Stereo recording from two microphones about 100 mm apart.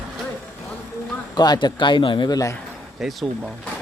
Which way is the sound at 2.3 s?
35° left (ahead or behind).